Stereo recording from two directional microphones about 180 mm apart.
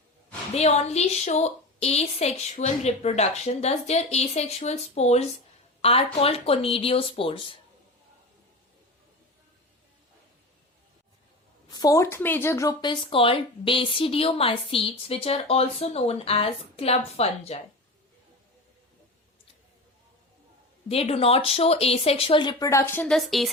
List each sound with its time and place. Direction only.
0.5 s speech: 35° left (ahead or behind)
11.7 s speech: 20° left (ahead or behind); by 17.6 s 35° left (ahead or behind)
20.8 s speech: 35° left (ahead or behind); by 23.5 s centre (ahead or behind)